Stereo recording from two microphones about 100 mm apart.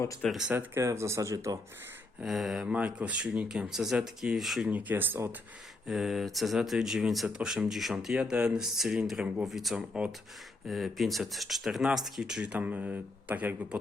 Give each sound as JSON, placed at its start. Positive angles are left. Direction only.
{"t": 0.3, "sound": "speech", "side_deg": -5}
{"t": 0.5, "sound": "speech", "side_deg": -25}
{"t": 2.2, "sound": "speech", "side_deg": 0}
{"t": 4.7, "sound": "speech", "side_deg": -20}
{"t": 5.9, "sound": "speech", "side_deg": 0}
{"t": 10.7, "sound": "speech", "side_deg": 0}